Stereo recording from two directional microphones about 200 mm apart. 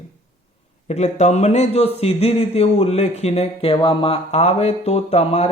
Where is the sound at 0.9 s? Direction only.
35° left (ahead or behind).